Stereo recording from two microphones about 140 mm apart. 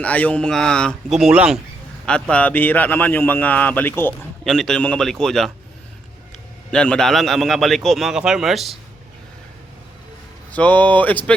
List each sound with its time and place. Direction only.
0.0 s a man's voice: 10° left (ahead or behind); by 1.5 s 5° right (ahead or behind)
2.3 s speech: 10° left (ahead or behind)
4.4 s a man's voice: 5° left (ahead or behind)
10.5 s speech: 10° left (ahead or behind)